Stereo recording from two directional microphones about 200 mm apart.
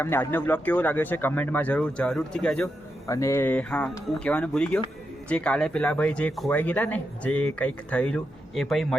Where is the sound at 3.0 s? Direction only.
15° left (ahead or behind).